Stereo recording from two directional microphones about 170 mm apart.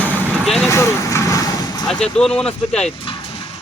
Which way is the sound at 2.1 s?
5° left (ahead or behind).